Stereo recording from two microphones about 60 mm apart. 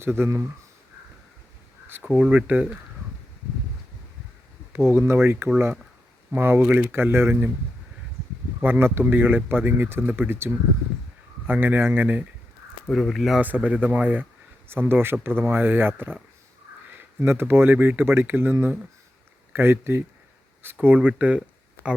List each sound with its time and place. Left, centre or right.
0.0 s speech: right
2.0 s speech: centre
2.3 s speech: right
4.7 s speech: right
6.6 s speech: right
6.9 s speech: right
8.6 s speech: right
12.9 s speech: centre
13.7 s speech: right
17.2 s speech: right
19.5 s speech: right
20.8 s speech: right
21.8 s a sound: left